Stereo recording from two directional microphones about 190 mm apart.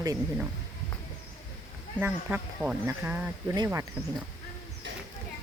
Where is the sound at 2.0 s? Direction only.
10° right (ahead or behind).